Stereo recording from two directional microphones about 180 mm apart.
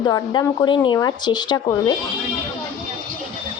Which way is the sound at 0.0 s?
25° left (ahead or behind).